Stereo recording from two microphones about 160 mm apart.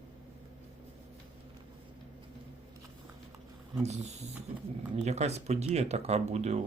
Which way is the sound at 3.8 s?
45° right (ahead or behind).